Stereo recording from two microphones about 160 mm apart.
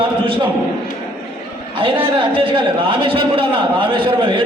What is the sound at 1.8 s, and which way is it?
A man's voice, 35° right (ahead or behind).